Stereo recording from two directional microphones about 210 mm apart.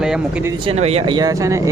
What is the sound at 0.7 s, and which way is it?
Speech, 30° right (ahead or behind).